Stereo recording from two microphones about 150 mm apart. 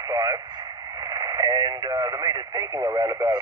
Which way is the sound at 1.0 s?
25° right (ahead or behind).